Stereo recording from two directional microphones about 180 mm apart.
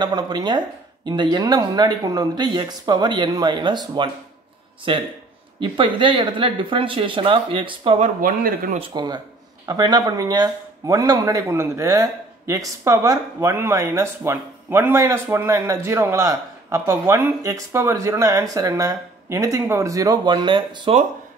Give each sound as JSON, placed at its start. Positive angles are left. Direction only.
{"t": 0.0, "sound": "speech", "side_deg": -20}
{"t": 8.0, "sound": "speech", "side_deg": -50}
{"t": 8.7, "sound": "speech", "side_deg": -25}